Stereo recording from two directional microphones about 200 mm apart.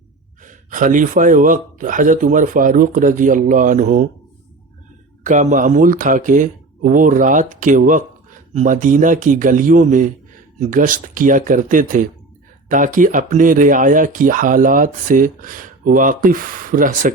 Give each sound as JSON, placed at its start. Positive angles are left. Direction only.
{"t": 0.4, "sound": "speech", "side_deg": -40}
{"t": 5.2, "sound": "speech", "side_deg": -40}